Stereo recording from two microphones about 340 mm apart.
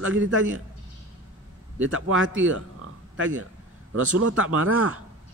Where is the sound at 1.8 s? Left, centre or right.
Right.